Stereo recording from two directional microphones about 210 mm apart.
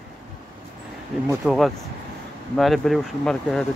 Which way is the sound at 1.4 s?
Centre (ahead or behind).